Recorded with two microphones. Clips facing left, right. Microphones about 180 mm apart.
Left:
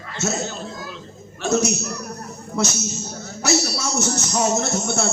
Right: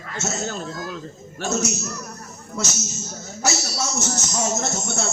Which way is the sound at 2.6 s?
60° left (ahead or behind).